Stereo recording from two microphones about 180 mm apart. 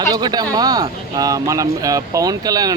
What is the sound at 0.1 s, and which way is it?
Speech, 20° right (ahead or behind).